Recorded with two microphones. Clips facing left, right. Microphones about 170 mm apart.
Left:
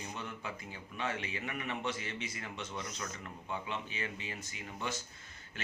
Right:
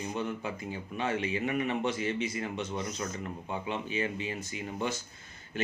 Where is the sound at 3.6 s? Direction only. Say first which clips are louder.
Right 8 dB; 15° right (ahead or behind).